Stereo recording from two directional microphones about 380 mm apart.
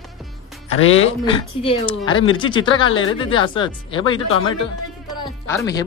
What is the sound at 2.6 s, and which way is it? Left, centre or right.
Speech, left.